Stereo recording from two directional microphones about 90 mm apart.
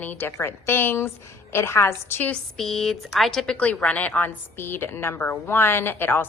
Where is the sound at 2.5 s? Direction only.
5° left (ahead or behind).